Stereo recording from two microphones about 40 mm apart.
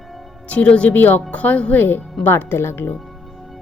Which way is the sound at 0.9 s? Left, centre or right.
Left.